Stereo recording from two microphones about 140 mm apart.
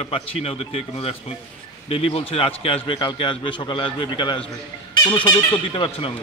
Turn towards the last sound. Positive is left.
turn(degrees=40)  # may be behind; listen again after turning